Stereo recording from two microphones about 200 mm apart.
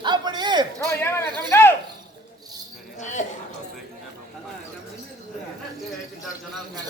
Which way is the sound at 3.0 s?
35° left (ahead or behind).